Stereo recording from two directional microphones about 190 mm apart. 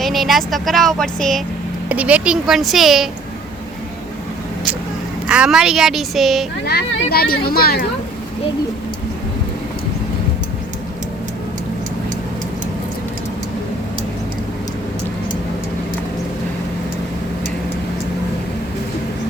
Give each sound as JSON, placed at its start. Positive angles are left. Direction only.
{"t": 0.0, "sound": "speech", "side_deg": 0}
{"t": 5.3, "sound": "speech", "side_deg": -5}
{"t": 6.7, "sound": "speech", "side_deg": 55}